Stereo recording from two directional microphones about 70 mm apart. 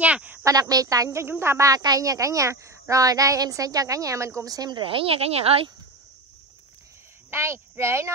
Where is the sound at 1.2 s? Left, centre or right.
Right.